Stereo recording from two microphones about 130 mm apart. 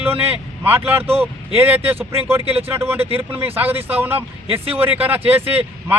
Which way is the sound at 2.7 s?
15° right (ahead or behind).